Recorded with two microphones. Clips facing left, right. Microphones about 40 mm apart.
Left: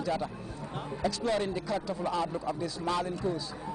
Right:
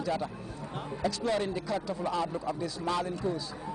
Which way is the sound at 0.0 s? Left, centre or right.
Centre.